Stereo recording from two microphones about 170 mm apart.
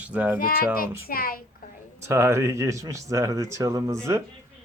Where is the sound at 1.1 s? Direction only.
60° left (ahead or behind).